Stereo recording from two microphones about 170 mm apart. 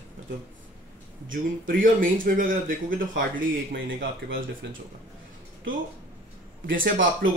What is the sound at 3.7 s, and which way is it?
Speech, 75° right (ahead or behind).